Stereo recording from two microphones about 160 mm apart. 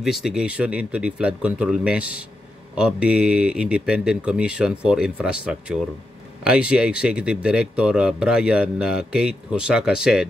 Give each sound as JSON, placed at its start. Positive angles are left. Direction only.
{"t": 0.0, "sound": "speech", "side_deg": -5}